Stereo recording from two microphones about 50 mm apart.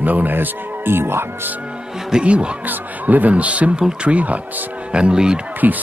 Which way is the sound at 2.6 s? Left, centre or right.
Right.